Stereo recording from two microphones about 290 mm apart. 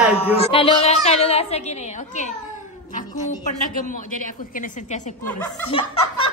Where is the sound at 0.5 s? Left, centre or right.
Centre.